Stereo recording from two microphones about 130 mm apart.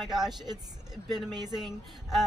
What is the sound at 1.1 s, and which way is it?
Speech, 35° right (ahead or behind).